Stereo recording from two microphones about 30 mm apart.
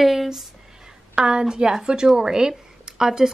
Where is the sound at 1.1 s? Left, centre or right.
Right.